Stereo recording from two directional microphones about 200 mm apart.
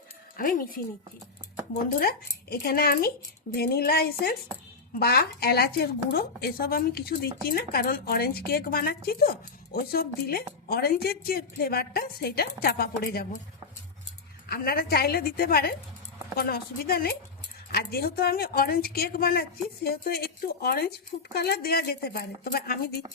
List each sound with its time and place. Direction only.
0.3 s a woman's voice: 45° left (ahead or behind)
2.0 s a woman's voice: 50° left (ahead or behind)
14.5 s a woman's voice: 50° left (ahead or behind)